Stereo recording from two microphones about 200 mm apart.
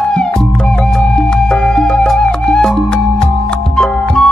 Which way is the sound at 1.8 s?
5° left (ahead or behind).